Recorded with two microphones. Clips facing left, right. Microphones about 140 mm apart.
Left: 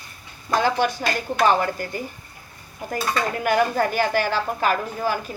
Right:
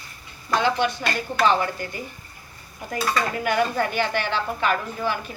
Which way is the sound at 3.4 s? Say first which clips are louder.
Left 4 dB; 45° left (ahead or behind).